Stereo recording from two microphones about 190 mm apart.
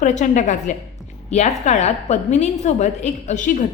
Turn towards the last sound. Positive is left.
turn(degrees=40)  # may be behind; listen again after turning